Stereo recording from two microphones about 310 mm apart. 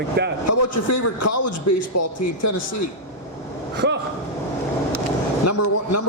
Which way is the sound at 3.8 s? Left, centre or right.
Right.